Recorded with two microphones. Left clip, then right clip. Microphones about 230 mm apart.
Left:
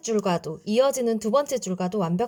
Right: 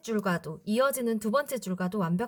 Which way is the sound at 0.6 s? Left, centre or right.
Centre.